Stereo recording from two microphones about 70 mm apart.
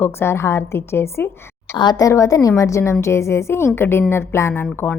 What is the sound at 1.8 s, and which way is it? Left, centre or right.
Speech, left.